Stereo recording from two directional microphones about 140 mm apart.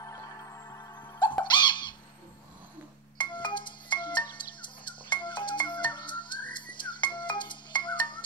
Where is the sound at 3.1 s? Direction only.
35° left (ahead or behind).